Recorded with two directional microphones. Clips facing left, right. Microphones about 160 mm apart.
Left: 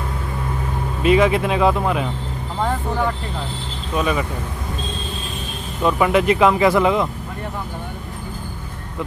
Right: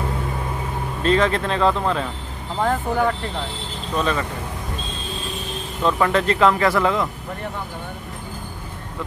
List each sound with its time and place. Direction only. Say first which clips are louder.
1.0 s speech: left 3 dB; 10° left (ahead or behind)
2.6 s speech: right 2 dB; centre (ahead or behind)
3.9 s speech: left 2 dB; 10° left (ahead or behind)
5.9 s speech: left 3 dB; 15° left (ahead or behind)